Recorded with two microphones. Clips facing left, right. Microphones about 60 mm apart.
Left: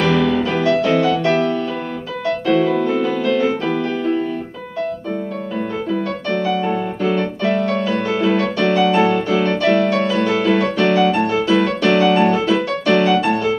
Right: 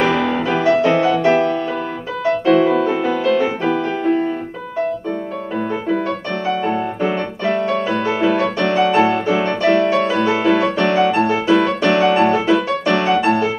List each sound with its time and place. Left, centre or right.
0.0 s music: right
3.6 s music: right
6.4 s music: right